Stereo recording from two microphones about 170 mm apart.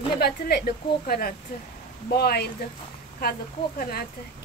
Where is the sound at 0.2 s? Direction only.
65° left (ahead or behind).